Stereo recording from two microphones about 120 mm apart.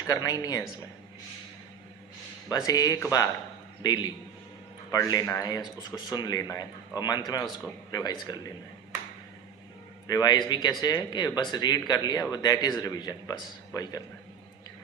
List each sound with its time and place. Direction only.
0.1 s speech: 30° left (ahead or behind)
2.5 s speech: 30° left (ahead or behind)
10.1 s speech: 35° left (ahead or behind)